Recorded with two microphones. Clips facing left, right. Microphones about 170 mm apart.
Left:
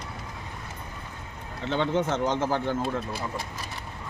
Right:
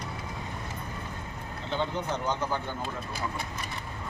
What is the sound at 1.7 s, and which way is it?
Speech, 80° left.